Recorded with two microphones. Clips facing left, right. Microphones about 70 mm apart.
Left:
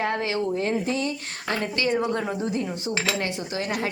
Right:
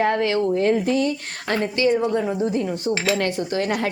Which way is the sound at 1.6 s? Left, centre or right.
Right.